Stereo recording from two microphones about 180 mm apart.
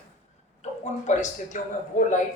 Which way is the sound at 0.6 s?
40° left (ahead or behind).